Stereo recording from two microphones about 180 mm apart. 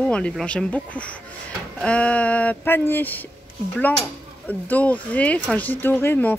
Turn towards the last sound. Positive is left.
turn(degrees=10)  # may be behind; listen again after turning